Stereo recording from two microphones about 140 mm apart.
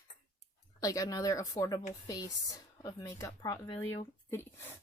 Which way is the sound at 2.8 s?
25° left (ahead or behind).